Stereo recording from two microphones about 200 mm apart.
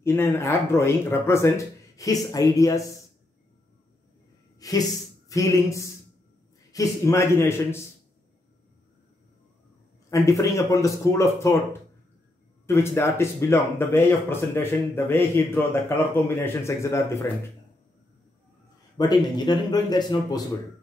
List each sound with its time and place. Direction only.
0.0 s speech: 10° left (ahead or behind)
4.6 s speech: 20° left (ahead or behind)
10.0 s speech: 15° left (ahead or behind)
12.6 s speech: 10° left (ahead or behind)
18.9 s speech: 20° left (ahead or behind)